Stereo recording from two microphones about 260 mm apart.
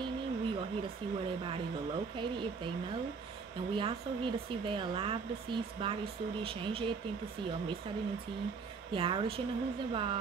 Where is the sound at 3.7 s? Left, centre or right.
Centre.